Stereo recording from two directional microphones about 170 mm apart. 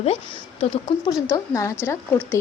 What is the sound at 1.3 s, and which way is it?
Speech, 20° left (ahead or behind).